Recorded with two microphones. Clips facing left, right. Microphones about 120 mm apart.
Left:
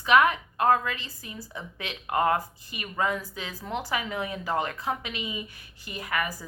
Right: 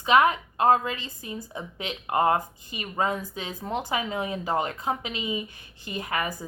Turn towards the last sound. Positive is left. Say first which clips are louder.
# right 1 dB
turn(degrees=-25)  # may be behind; listen again after turning